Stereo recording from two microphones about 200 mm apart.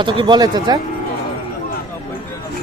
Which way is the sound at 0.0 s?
25° right (ahead or behind).